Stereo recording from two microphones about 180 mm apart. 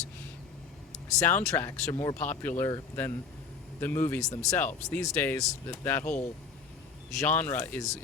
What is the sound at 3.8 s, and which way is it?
Speech, 10° left (ahead or behind).